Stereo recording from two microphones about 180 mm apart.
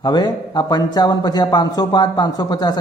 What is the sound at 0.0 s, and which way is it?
A man's voice, 25° left (ahead or behind).